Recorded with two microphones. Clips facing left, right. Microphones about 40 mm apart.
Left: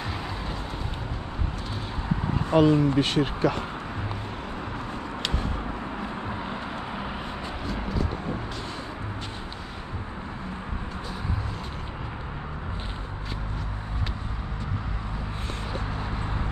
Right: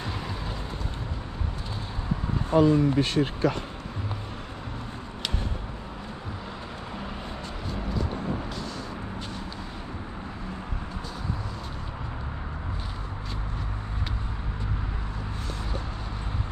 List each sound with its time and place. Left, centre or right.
2.5 s speech: left